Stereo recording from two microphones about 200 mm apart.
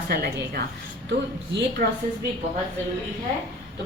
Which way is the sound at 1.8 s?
45° right (ahead or behind).